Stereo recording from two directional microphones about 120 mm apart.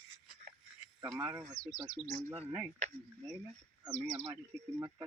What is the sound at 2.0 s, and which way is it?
Speech, 10° right (ahead or behind).